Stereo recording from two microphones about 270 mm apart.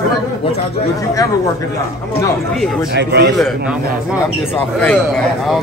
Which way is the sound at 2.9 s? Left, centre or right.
Right.